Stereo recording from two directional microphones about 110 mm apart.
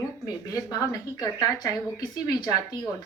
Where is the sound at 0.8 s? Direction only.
35° left (ahead or behind).